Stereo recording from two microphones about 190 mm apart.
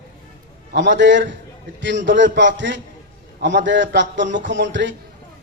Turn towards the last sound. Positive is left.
turn(degrees=-70)  # may be behind; listen again after turning